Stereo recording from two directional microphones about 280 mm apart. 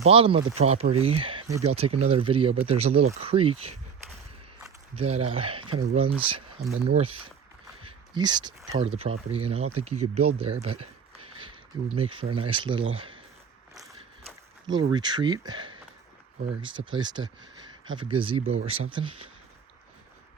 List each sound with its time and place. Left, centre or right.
0.0 s speech: right
4.9 s speech: right
10.3 s a sound: right
11.9 s speech: centre
14.7 s speech: centre